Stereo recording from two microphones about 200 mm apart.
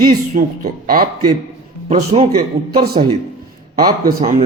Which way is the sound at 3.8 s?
20° right (ahead or behind).